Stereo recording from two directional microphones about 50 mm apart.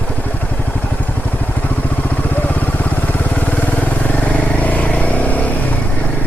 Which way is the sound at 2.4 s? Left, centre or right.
Left.